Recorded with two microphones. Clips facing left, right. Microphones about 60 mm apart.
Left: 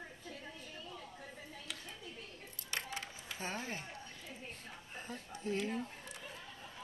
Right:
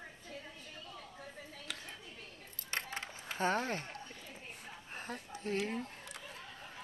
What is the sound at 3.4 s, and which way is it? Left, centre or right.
Speech, right.